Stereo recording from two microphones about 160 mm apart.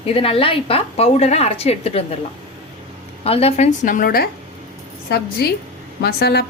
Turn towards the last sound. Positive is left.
turn(degrees=80)